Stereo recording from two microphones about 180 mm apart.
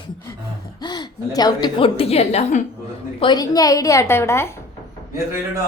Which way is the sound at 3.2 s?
25° left (ahead or behind).